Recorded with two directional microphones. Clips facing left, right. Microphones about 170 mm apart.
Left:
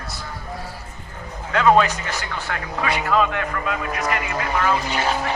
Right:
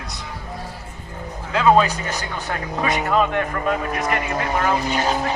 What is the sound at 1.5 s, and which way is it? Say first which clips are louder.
Speech: even; 25° right (ahead or behind).